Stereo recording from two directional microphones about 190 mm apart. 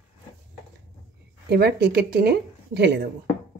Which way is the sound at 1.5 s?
55° right (ahead or behind).